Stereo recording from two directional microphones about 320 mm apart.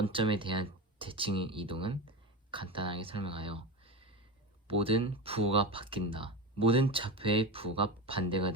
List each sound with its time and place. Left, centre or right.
0.0 s speech: centre